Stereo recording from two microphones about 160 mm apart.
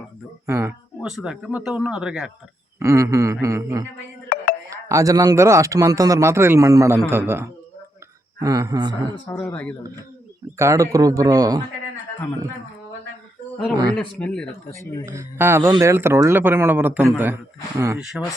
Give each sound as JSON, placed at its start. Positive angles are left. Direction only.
{"t": 0.4, "sound": "speech", "side_deg": -15}
{"t": 1.0, "sound": "speech", "side_deg": -5}
{"t": 2.7, "sound": "speech", "side_deg": -20}
{"t": 9.3, "sound": "speech", "side_deg": 10}
{"t": 10.6, "sound": "speech", "side_deg": -20}
{"t": 13.9, "sound": "speech", "side_deg": 5}
{"t": 15.0, "sound": "speech", "side_deg": -15}
{"t": 17.9, "sound": "speech", "side_deg": 0}